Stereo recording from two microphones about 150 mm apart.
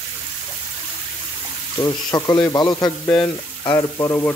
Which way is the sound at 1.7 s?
25° left (ahead or behind).